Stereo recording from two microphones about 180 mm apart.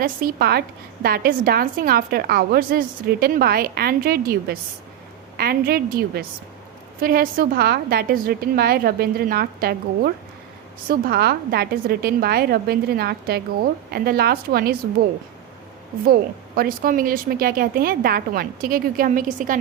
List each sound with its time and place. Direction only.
0.0 s a woman's voice: 50° right (ahead or behind)
16.6 s speech: 50° right (ahead or behind)